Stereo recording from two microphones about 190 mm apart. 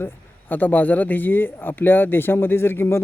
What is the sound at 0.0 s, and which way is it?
A man's voice, 10° left (ahead or behind).